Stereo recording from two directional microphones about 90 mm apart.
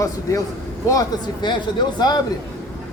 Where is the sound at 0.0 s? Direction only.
35° left (ahead or behind).